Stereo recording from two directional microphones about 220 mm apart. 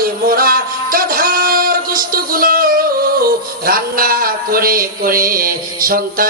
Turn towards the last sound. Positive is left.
turn(degrees=-40)  # may be behind; listen again after turning